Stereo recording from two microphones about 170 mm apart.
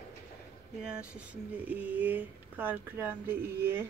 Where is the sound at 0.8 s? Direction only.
5° right (ahead or behind).